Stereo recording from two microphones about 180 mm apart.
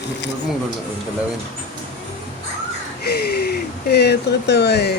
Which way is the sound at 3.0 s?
60° left (ahead or behind).